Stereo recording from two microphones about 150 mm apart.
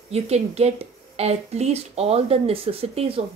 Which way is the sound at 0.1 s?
45° right (ahead or behind).